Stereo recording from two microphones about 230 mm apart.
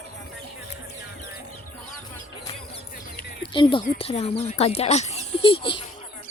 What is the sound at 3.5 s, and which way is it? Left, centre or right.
Speech, left.